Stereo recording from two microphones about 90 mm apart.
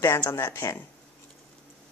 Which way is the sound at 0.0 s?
30° left (ahead or behind).